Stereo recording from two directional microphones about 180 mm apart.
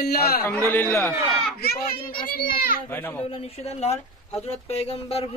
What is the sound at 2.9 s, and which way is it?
Speech, 10° left (ahead or behind).